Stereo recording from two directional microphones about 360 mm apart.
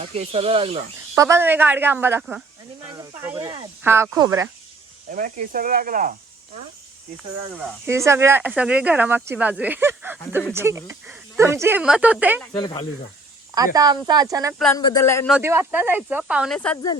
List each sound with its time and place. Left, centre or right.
0.0 s speech: centre
5.1 s speech: right
7.9 s speech: centre
12.5 s speech: centre
13.7 s speech: centre
14.6 s speech: centre
15.4 s speech: centre